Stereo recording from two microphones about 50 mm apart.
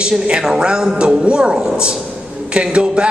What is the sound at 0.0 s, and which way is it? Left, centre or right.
A man's voice, centre.